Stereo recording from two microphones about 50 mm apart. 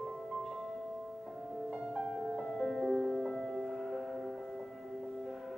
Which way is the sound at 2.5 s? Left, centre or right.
Centre.